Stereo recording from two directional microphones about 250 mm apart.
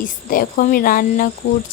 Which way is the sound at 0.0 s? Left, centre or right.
Left.